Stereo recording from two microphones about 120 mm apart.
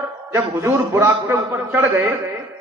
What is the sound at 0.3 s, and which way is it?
A man's voice, 20° right (ahead or behind).